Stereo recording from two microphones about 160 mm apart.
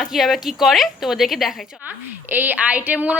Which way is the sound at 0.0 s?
Centre (ahead or behind).